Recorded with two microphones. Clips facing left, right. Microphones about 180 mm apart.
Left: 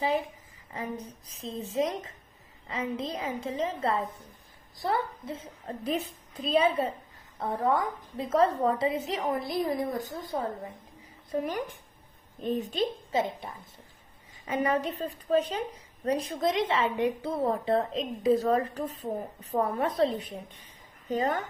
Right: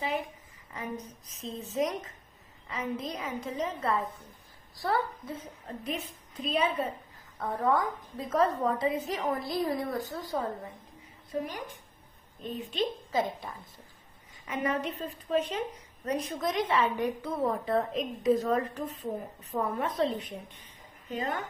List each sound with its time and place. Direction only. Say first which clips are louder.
1.3 s a child's voice: left 3 dB; 30° left (ahead or behind)
12.4 s a woman's voice: left 4 dB; 45° left (ahead or behind)
13.1 s a child's voice: left 1 dB; 25° left (ahead or behind)
14.4 s a woman's voice: left 3 dB; 35° left (ahead or behind)